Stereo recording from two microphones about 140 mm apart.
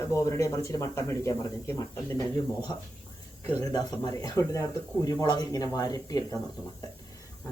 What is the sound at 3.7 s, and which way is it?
Speech, 25° left (ahead or behind).